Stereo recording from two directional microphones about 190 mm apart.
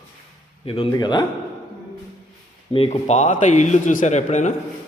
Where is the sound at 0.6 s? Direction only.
30° left (ahead or behind).